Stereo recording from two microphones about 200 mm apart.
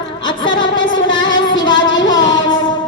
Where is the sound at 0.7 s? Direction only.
70° left (ahead or behind).